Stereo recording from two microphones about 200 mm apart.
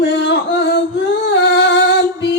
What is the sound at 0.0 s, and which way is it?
Music, 60° left (ahead or behind).